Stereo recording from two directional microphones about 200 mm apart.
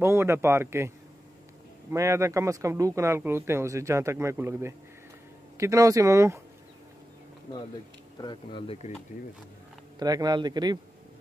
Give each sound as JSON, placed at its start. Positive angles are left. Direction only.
{"t": 0.0, "sound": "speech", "side_deg": -15}
{"t": 8.2, "sound": "speech", "side_deg": 25}
{"t": 9.9, "sound": "a man's voice", "side_deg": -20}